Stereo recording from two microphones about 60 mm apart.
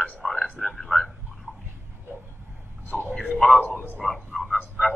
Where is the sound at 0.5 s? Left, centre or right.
Centre.